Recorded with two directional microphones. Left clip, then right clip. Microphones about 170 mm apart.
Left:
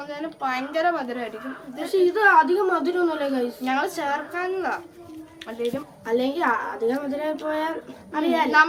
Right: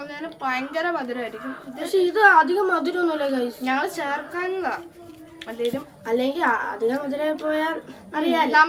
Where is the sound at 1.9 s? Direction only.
20° right (ahead or behind).